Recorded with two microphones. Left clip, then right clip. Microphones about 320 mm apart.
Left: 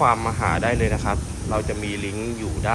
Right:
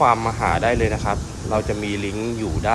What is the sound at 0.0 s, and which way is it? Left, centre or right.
Speech, centre.